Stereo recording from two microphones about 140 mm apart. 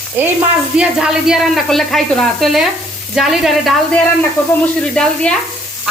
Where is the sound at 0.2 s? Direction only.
10° right (ahead or behind).